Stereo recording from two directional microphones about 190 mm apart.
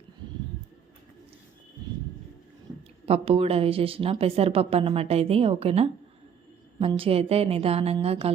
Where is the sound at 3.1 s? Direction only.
30° right (ahead or behind).